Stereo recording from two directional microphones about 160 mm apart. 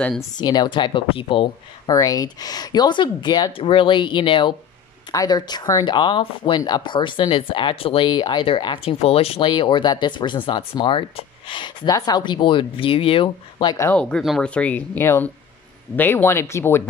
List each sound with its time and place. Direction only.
0.4 s speech: 25° left (ahead or behind)
13.9 s speech: 5° left (ahead or behind)